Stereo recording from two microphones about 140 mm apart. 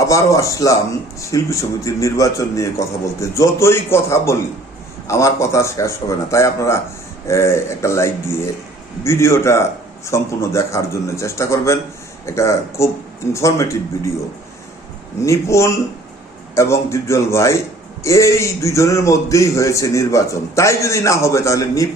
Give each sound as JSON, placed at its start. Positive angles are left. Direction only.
{"t": 0.0, "sound": "a man's voice", "side_deg": 20}
{"t": 15.2, "sound": "a man's voice", "side_deg": 20}